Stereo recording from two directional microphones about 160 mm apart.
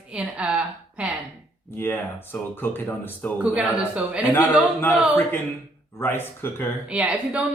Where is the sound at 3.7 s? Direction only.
10° right (ahead or behind).